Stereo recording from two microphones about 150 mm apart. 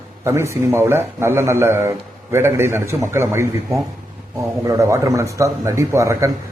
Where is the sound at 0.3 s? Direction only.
15° right (ahead or behind).